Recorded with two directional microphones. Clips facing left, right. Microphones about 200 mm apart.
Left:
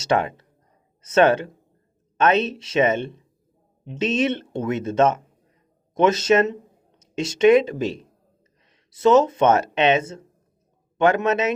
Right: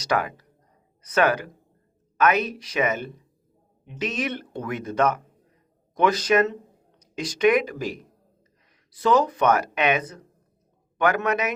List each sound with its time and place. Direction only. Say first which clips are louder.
0.0 s speech: left 4 dB; 25° left (ahead or behind)